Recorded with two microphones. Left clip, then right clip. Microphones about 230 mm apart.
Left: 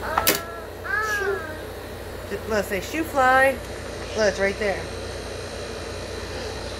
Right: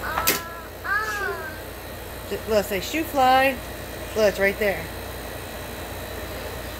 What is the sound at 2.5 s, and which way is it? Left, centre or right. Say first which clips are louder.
A woman's voice: right 2 dB; centre.